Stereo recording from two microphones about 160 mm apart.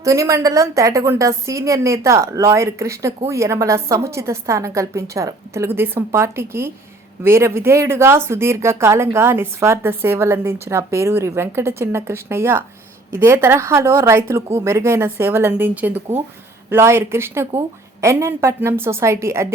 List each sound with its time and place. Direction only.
0.0 s a woman's voice: 20° right (ahead or behind)